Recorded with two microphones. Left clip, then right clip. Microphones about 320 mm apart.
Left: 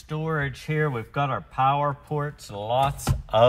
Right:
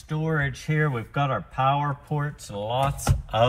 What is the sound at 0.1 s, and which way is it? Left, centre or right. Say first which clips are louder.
A man's voice: right 1 dB; centre.